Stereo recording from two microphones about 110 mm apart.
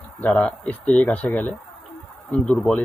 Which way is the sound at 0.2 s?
10° left (ahead or behind).